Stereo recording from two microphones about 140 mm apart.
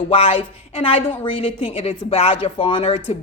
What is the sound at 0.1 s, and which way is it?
A woman's voice, 45° left (ahead or behind).